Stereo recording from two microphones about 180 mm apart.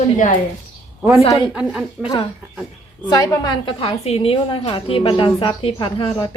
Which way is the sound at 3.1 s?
20° left (ahead or behind).